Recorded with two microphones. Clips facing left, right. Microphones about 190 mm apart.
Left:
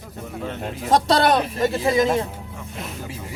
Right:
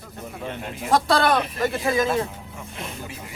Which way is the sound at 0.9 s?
20° left (ahead or behind).